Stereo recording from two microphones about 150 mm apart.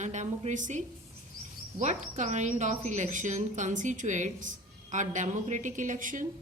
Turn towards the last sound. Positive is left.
turn(degrees=-60)  # may be behind; listen again after turning